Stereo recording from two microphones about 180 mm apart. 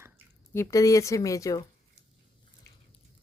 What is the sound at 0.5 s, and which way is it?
A woman's voice, 20° left (ahead or behind).